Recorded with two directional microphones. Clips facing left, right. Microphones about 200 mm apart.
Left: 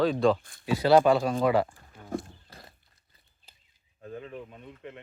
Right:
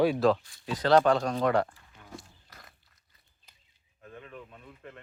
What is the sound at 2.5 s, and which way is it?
Horse, 30° left (ahead or behind).